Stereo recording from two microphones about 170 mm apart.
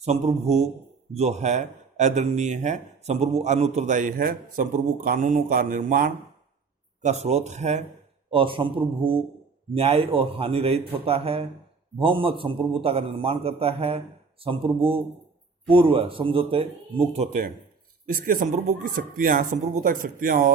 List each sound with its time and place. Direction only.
0.0 s a man's voice: 40° right (ahead or behind); by 6.1 s 55° right (ahead or behind)
7.0 s a man's voice: 40° right (ahead or behind)
8.3 s a man's voice: 30° right (ahead or behind)
18.1 s speech: 55° right (ahead or behind)